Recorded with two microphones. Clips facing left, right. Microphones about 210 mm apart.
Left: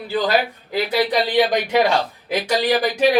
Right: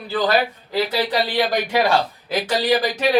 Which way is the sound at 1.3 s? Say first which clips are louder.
Left 4 dB; 20° left (ahead or behind).